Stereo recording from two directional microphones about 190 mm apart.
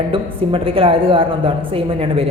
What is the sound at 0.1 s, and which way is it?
A woman's voice, 30° right (ahead or behind).